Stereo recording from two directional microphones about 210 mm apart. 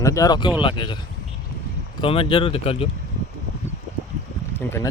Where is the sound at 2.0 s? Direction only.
25° left (ahead or behind).